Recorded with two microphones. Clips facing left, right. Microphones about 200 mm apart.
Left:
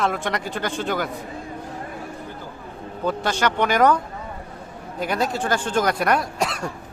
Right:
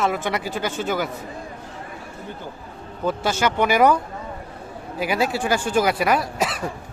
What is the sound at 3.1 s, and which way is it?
Speech, 5° right (ahead or behind).